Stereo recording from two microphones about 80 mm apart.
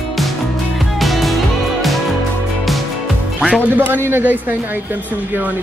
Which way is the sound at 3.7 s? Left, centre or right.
Right.